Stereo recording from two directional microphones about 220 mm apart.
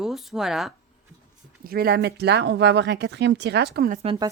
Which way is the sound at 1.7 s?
45° right (ahead or behind).